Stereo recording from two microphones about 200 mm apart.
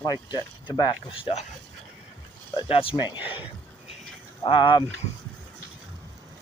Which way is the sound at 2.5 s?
25° left (ahead or behind).